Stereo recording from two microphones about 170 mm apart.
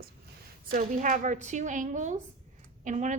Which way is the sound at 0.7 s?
50° right (ahead or behind).